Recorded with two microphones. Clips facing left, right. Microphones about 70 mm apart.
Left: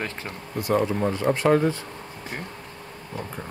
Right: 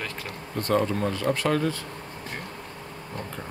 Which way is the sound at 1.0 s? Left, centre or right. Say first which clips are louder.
Left 4 dB; left.